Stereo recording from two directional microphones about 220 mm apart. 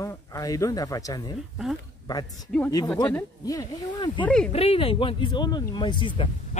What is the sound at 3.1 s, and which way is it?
Speech, 10° left (ahead or behind).